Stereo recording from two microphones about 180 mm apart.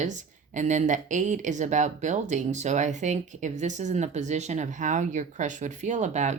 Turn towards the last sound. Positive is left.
turn(degrees=-40)  # may be behind; listen again after turning